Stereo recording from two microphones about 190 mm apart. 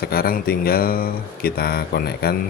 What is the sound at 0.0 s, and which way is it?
Speech, 50° left (ahead or behind).